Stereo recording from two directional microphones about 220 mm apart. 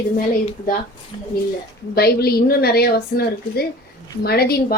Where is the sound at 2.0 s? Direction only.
45° left (ahead or behind).